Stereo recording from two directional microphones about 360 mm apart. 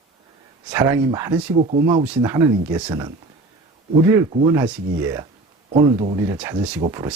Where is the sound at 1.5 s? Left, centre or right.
Centre.